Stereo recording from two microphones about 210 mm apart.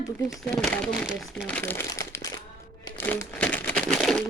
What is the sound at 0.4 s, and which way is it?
Speech, 5° left (ahead or behind).